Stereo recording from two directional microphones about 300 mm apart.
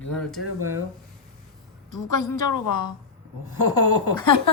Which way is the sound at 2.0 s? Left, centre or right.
Left.